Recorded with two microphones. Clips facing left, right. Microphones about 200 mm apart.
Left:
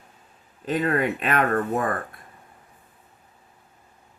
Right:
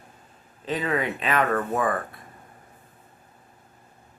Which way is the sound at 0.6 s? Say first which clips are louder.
Left 3 dB; 45° left (ahead or behind).